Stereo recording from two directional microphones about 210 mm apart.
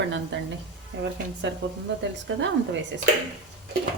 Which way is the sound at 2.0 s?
60° right (ahead or behind).